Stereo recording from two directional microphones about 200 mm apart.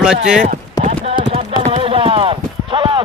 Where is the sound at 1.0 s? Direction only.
30° right (ahead or behind).